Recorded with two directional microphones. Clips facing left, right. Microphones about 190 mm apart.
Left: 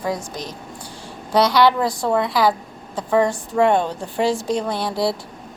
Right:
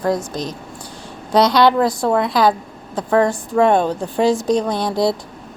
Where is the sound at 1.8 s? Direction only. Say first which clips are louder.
Right 3 dB; 15° left (ahead or behind).